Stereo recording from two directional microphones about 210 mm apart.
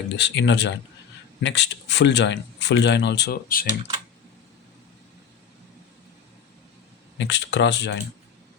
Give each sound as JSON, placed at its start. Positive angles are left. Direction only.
{"t": 0.2, "sound": "speech", "side_deg": 55}
{"t": 7.2, "sound": "speech", "side_deg": 55}